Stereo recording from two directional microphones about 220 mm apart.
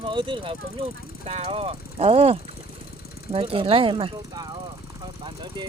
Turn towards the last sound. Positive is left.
turn(degrees=-20)  # may be behind; listen again after turning